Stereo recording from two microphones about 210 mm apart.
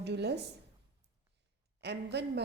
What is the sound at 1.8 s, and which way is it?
Speech, 55° right (ahead or behind).